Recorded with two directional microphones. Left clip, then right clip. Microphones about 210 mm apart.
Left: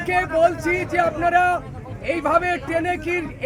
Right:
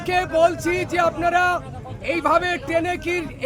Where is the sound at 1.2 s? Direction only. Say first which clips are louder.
Left 1 dB; 5° right (ahead or behind).